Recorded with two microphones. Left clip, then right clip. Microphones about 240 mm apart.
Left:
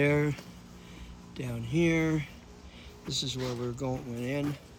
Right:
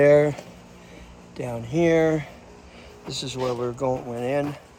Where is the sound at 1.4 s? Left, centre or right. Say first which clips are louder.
Right 7 dB; centre.